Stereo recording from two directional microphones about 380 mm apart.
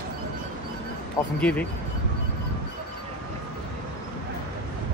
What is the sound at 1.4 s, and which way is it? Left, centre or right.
Speech, centre.